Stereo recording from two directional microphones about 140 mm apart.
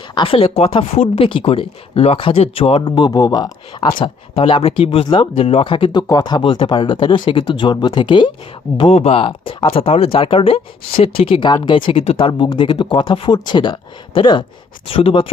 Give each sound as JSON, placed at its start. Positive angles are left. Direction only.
{"t": 0.1, "sound": "speech", "side_deg": 40}
{"t": 4.0, "sound": "speech", "side_deg": 40}
{"t": 8.8, "sound": "speech", "side_deg": 45}
{"t": 12.3, "sound": "speech", "side_deg": 30}